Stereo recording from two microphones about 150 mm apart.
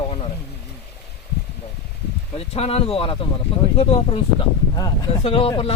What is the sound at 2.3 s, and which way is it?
Speech, 40° left (ahead or behind).